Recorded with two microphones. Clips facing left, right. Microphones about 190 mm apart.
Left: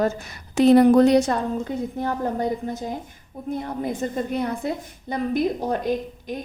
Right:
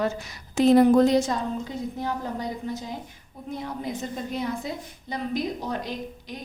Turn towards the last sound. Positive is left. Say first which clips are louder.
# left 9 dB
turn(degrees=50)  # may be behind; listen again after turning